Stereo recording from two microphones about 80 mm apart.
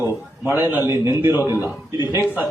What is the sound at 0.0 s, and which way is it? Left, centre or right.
A man's voice, right.